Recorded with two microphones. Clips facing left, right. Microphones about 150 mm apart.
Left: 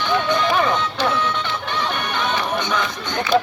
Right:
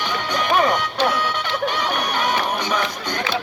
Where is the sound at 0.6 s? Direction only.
15° right (ahead or behind).